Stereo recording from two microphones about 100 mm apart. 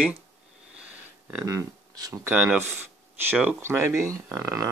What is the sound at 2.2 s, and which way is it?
Speech, 15° right (ahead or behind).